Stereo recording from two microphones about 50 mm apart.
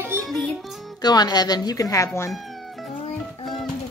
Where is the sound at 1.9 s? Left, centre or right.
Left.